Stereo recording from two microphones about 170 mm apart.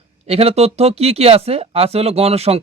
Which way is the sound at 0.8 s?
35° right (ahead or behind).